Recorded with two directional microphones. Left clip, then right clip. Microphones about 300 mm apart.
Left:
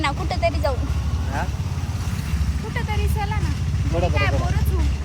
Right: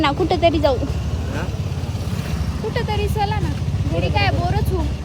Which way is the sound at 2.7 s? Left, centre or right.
Centre.